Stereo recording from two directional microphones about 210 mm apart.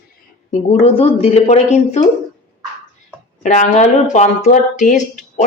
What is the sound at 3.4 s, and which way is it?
Speech, 35° left (ahead or behind).